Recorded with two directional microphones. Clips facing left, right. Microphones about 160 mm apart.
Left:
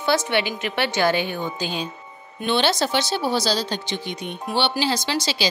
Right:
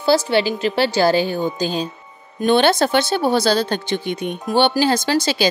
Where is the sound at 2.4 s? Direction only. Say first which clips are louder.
Right 6 dB; 50° right (ahead or behind).